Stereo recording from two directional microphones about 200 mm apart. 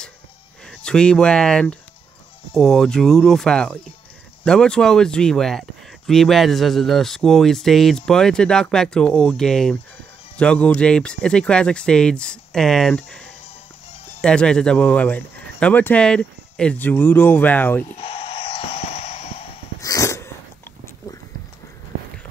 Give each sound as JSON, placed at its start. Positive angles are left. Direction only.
{"t": 0.7, "sound": "speech", "side_deg": 5}
{"t": 17.8, "sound": "a sound", "side_deg": 30}
{"t": 19.8, "sound": "dog", "side_deg": 15}